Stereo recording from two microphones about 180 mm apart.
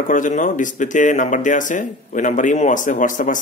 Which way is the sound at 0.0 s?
45° left (ahead or behind).